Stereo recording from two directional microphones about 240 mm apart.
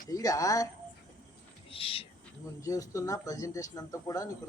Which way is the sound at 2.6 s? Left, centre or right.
Centre.